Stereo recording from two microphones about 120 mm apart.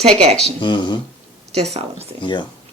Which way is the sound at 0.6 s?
40° left (ahead or behind).